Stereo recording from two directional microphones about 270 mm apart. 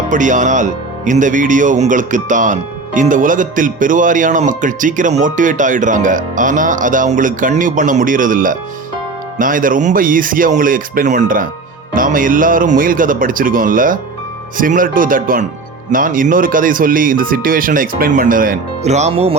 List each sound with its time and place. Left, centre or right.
0.1 s speech: right